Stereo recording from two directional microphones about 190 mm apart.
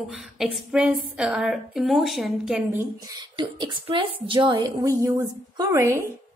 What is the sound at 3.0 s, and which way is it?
A woman's voice, 20° right (ahead or behind).